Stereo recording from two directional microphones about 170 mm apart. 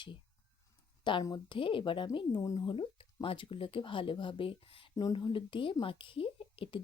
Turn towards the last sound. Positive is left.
turn(degrees=30)  # may be behind; listen again after turning